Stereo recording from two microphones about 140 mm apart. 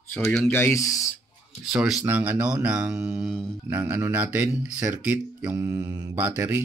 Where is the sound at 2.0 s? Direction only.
15° right (ahead or behind).